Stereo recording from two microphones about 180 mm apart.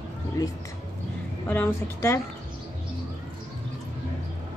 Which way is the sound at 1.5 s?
15° left (ahead or behind).